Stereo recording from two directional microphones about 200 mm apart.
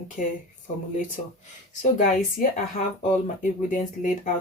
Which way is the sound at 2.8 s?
40° left (ahead or behind).